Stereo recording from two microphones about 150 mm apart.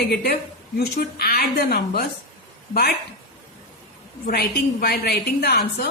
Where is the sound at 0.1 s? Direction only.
90° left.